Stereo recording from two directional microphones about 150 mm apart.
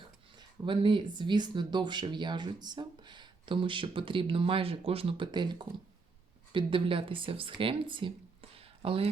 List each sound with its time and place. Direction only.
0.0 s speech: 35° right (ahead or behind)